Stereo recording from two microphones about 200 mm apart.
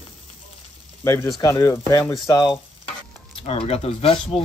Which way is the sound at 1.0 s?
15° left (ahead or behind).